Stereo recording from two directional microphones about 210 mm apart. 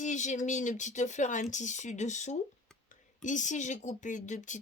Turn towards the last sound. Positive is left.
turn(degrees=35)  # may be behind; listen again after turning